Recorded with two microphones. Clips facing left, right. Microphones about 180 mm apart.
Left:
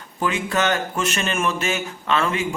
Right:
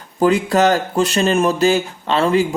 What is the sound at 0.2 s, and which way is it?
Speech, 35° right (ahead or behind).